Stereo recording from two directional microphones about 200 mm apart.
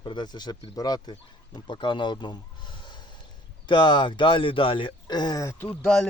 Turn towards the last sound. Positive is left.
turn(degrees=0)  # may be behind; listen again after turning